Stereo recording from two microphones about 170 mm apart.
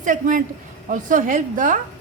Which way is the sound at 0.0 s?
50° right (ahead or behind).